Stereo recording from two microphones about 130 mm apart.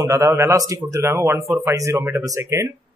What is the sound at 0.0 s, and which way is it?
Speech, 25° right (ahead or behind).